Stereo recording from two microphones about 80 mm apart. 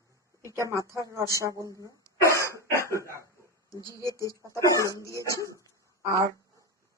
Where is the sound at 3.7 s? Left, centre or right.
Left.